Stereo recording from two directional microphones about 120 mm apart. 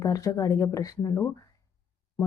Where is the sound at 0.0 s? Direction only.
30° left (ahead or behind).